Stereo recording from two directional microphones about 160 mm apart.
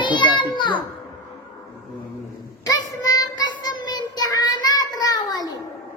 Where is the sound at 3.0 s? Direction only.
25° left (ahead or behind).